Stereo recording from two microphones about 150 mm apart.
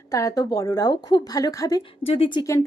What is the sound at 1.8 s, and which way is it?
Speech, 40° left (ahead or behind).